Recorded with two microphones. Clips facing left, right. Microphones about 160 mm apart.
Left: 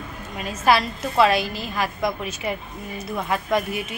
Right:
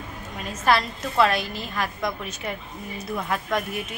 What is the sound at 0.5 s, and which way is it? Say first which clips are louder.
A woman's voice: left 2 dB; 5° left (ahead or behind).